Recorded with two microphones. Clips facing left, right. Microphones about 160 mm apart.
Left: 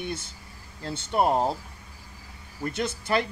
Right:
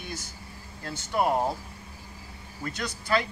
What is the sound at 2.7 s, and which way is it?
Speech, 25° left (ahead or behind).